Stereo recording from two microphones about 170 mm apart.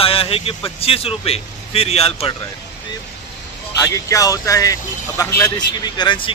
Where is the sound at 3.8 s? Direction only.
20° left (ahead or behind).